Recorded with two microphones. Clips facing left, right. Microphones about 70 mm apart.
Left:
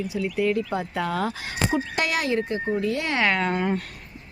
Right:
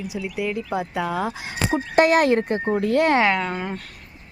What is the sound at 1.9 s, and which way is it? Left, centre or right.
Speech, right.